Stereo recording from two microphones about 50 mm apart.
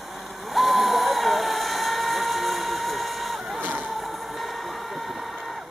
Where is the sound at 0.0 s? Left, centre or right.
Centre.